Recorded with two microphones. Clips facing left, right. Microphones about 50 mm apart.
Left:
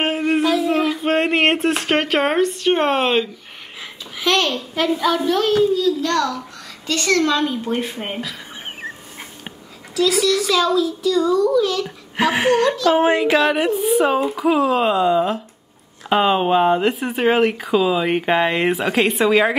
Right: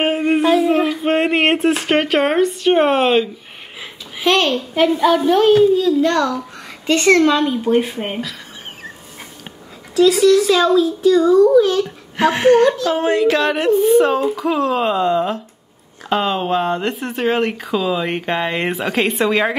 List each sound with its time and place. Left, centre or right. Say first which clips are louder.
0.6 s speech: right 3 dB; centre
4.2 s a child's voice: right 3 dB; right
7.3 s speech: right 5 dB; centre
9.9 s speech: right 6 dB; right
12.2 s speech: right 4 dB; centre
12.9 s a sound: even; left
13.4 s speech: right 3 dB; centre
16.1 s speech: left 2 dB; centre